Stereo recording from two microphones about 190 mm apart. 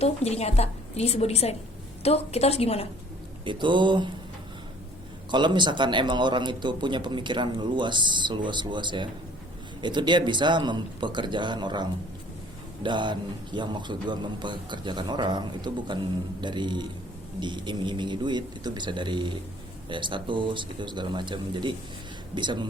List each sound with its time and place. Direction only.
0.0 s a woman's voice: 35° left (ahead or behind)
3.4 s a man's voice: 25° right (ahead or behind)
5.3 s a man's voice: 25° right (ahead or behind)